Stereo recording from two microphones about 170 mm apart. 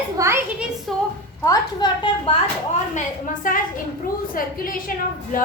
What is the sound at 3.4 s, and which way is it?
A woman's voice, 50° left (ahead or behind).